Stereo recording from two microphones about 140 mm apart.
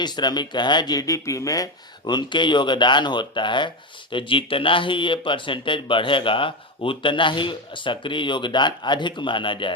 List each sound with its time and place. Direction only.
0.0 s speech: 30° left (ahead or behind)